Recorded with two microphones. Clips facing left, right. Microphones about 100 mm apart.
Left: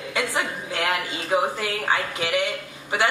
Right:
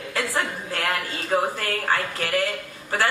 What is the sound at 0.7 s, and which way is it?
Speech, 10° left (ahead or behind).